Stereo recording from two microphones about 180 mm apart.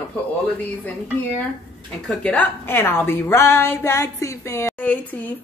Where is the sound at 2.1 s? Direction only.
5° left (ahead or behind).